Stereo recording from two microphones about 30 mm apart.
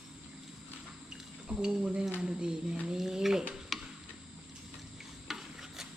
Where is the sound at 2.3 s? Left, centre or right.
Right.